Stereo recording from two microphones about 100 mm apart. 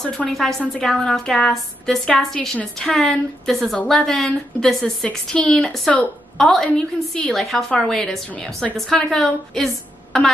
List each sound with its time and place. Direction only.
0.0 s a woman's voice: 5° left (ahead or behind)